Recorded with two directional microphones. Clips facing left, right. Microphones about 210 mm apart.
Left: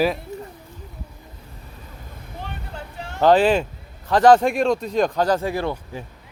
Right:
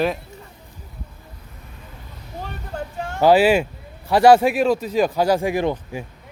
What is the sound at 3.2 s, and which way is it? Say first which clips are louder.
Speech: right 1 dB; 10° right (ahead or behind).